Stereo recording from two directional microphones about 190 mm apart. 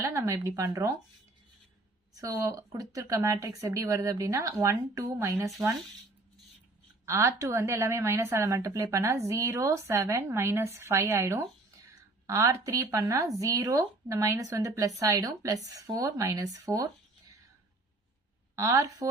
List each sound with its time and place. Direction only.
0.0 s speech: 15° right (ahead or behind)
2.1 s a woman's voice: 15° right (ahead or behind)
7.0 s a woman's voice: 15° right (ahead or behind)
18.5 s a woman's voice: 15° right (ahead or behind)